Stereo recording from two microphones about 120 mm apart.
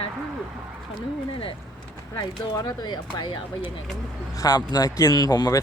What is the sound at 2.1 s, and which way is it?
Speech, 35° left (ahead or behind).